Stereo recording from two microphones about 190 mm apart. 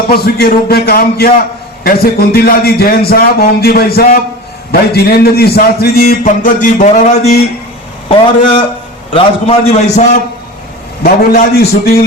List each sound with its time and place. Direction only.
0.1 s a man's voice: 55° left (ahead or behind); by 7.3 s 35° left (ahead or behind)
8.4 s a man's voice: 25° left (ahead or behind)
11.0 s a man's voice: 55° left (ahead or behind)